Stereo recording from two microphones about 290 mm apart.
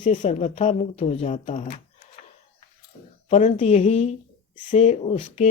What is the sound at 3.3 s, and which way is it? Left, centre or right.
Speech, left.